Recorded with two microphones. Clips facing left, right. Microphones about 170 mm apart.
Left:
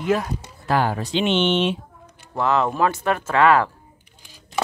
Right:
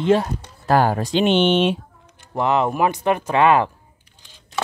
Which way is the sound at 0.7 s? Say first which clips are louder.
Right 4 dB; 40° right (ahead or behind).